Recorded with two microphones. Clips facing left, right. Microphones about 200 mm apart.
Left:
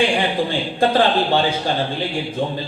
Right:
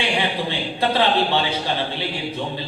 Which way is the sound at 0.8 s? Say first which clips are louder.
Left 3 dB; 45° left (ahead or behind).